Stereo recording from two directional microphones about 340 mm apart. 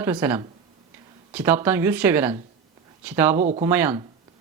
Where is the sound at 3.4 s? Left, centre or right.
Right.